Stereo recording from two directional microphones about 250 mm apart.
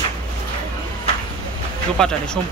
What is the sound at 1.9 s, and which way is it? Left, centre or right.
Speech, centre.